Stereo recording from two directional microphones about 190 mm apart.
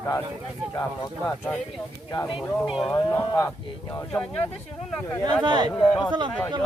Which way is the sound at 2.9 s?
20° left (ahead or behind).